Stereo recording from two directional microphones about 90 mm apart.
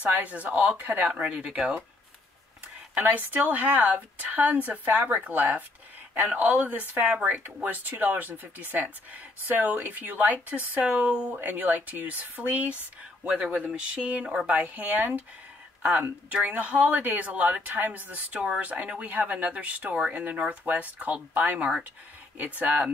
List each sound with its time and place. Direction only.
0.0 s speech: 15° right (ahead or behind)
2.9 s a woman's voice: 20° right (ahead or behind)